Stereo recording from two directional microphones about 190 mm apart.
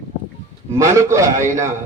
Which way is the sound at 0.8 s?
15° right (ahead or behind).